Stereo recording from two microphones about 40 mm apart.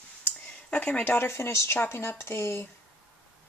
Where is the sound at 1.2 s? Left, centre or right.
Left.